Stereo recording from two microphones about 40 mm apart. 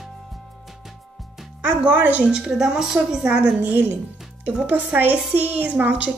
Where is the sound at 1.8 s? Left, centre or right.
Right.